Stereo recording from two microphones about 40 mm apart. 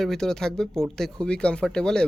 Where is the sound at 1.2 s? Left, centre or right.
Left.